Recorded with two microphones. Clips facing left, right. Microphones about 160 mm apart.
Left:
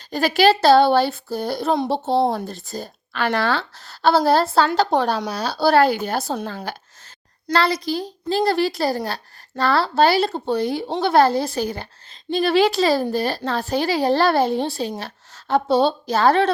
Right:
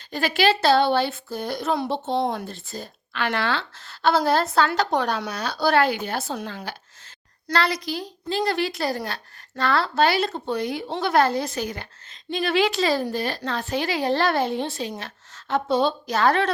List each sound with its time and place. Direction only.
0.1 s a woman's voice: 40° left (ahead or behind)